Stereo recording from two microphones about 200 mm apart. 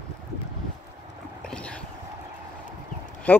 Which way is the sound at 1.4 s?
5° left (ahead or behind).